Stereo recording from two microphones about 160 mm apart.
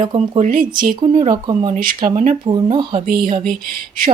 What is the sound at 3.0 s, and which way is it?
Speech, 60° right (ahead or behind).